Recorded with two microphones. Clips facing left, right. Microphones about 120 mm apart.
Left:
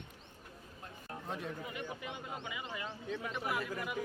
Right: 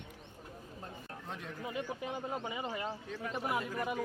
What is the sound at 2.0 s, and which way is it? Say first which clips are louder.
Speech: right 5 dB; 35° right (ahead or behind).